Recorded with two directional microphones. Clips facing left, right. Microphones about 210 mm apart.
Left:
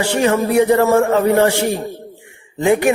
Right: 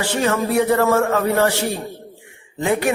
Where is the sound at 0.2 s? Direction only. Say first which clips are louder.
Left 4 dB; 20° left (ahead or behind).